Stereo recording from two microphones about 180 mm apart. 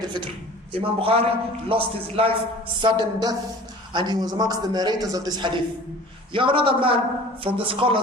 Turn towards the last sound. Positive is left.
turn(degrees=-30)  # may be behind; listen again after turning